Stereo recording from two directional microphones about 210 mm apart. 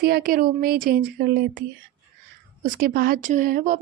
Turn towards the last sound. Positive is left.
turn(degrees=-40)  # may be behind; listen again after turning